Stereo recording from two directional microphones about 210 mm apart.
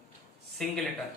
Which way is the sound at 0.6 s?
5° left (ahead or behind).